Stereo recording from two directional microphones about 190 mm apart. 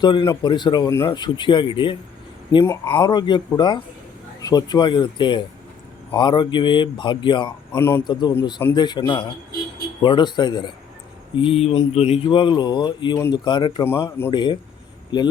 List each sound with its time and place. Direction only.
0.0 s speech: 25° left (ahead or behind)
7.7 s speech: 10° left (ahead or behind)
8.0 s speech: 25° left (ahead or behind)